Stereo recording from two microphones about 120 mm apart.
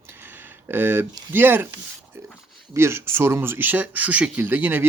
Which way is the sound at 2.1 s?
20° right (ahead or behind).